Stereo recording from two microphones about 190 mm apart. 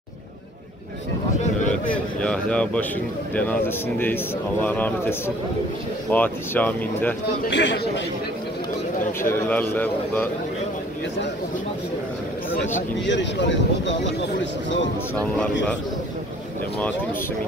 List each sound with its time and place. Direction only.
2.2 s speech: 5° left (ahead or behind)
7.4 s speech: 70° left (ahead or behind)
9.2 s speech: 10° left (ahead or behind)
13.0 s speech: 70° left (ahead or behind)